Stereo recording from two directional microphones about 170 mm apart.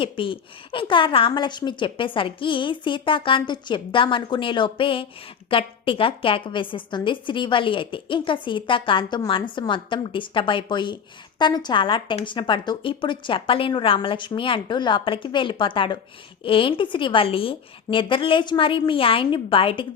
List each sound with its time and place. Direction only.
0.0 s a woman's voice: 30° left (ahead or behind)